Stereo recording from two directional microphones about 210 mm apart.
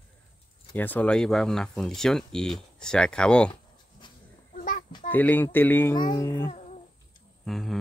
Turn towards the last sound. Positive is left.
turn(degrees=0)  # may be behind; listen again after turning